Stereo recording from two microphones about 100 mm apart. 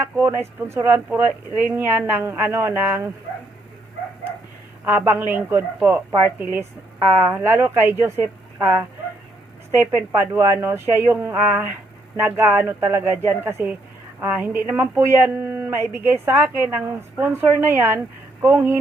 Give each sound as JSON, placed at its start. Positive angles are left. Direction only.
{"t": 0.0, "sound": "speech", "side_deg": -20}
{"t": 4.9, "sound": "speech", "side_deg": -20}
{"t": 9.7, "sound": "speech", "side_deg": -20}